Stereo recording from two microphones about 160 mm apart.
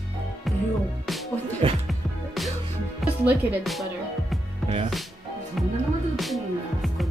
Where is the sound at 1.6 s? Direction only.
35° right (ahead or behind).